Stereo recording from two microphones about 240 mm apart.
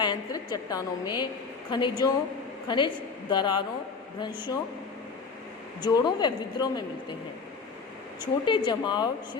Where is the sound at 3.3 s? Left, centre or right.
Centre.